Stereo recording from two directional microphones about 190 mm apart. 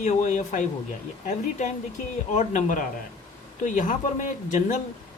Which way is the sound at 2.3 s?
40° left (ahead or behind).